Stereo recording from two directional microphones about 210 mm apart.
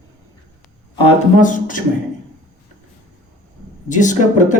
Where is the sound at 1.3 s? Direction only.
40° left (ahead or behind).